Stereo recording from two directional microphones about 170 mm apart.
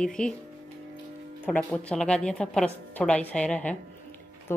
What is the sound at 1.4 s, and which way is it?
Speech, 10° left (ahead or behind).